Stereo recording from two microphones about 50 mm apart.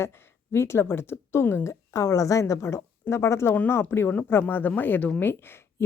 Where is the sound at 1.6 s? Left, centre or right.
Left.